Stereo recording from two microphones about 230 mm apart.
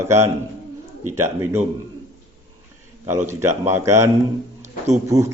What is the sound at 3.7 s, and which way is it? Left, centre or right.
Speech, centre.